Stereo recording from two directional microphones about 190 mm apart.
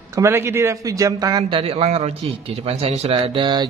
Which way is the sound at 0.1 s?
15° right (ahead or behind).